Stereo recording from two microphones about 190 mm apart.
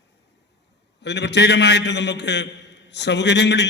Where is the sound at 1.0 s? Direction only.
65° left (ahead or behind).